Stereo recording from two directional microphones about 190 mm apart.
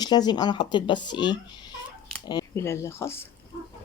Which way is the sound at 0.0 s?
20° left (ahead or behind).